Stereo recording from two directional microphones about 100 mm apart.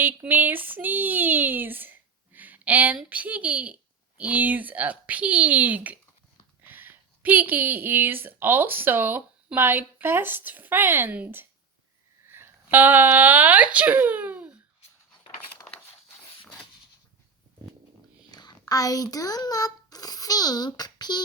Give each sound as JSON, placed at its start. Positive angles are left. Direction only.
{"t": 0.0, "sound": "a woman's voice", "side_deg": -20}
{"t": 18.3, "sound": "a child's voice", "side_deg": 45}